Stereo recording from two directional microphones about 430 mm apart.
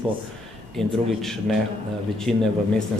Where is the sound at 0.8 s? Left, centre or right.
Centre.